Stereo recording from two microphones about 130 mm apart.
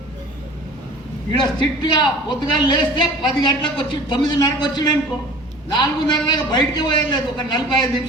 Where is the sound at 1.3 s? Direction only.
35° left (ahead or behind).